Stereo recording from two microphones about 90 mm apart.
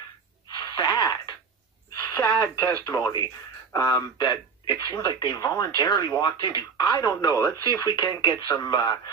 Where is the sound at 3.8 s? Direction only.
45° left (ahead or behind).